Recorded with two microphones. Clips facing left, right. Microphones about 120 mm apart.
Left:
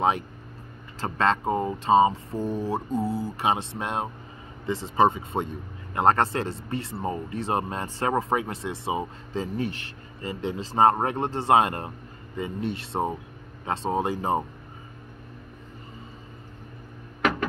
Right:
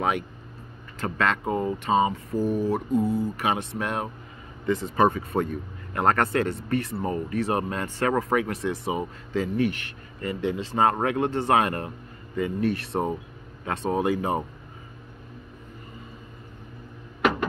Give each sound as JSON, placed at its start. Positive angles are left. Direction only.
{"t": 1.0, "sound": "speech", "side_deg": 30}